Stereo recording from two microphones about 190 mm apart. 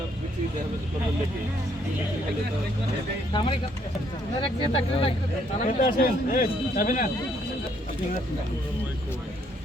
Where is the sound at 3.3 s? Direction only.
25° left (ahead or behind).